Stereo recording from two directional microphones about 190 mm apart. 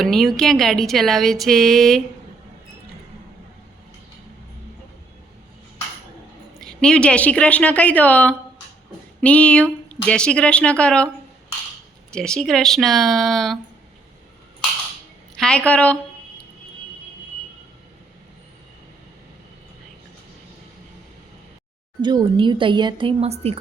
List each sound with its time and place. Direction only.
0.0 s speech: centre (ahead or behind)
6.7 s speech: 5° left (ahead or behind)
12.1 s speech: 5° left (ahead or behind)
15.4 s speech: 5° left (ahead or behind)
22.0 s a woman's voice: 25° right (ahead or behind)